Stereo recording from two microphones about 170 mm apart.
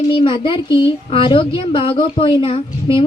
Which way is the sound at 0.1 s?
30° left (ahead or behind).